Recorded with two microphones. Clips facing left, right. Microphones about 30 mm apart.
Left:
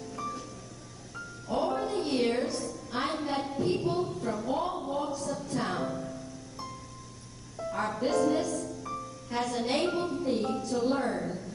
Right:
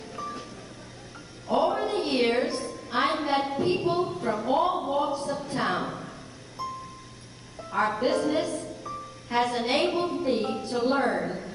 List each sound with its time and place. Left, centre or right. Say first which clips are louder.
0.1 s vehicle: right 2 dB; right
1.5 s a sound: right 5 dB; right
7.7 s a woman's voice: right 4 dB; right